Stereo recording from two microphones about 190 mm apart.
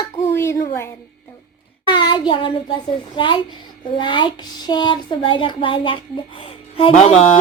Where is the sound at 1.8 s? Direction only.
25° left (ahead or behind).